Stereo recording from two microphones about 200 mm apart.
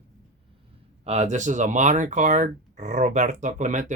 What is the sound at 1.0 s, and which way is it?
Speech, 35° right (ahead or behind).